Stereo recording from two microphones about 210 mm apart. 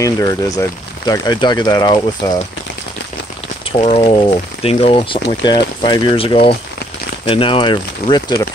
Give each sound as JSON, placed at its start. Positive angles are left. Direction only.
{"t": 0.0, "sound": "speech", "side_deg": 15}
{"t": 3.7, "sound": "speech", "side_deg": 25}